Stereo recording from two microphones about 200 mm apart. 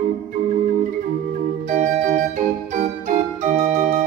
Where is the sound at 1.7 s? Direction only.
40° right (ahead or behind).